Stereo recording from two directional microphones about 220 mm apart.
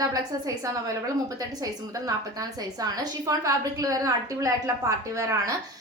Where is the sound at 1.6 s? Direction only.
15° right (ahead or behind).